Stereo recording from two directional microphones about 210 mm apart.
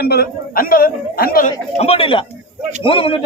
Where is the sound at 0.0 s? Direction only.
50° left (ahead or behind).